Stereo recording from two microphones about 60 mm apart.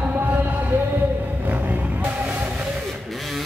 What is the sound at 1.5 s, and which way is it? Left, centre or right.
Music, right.